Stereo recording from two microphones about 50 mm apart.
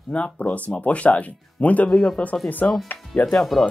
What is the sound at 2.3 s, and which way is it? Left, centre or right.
Speech, left.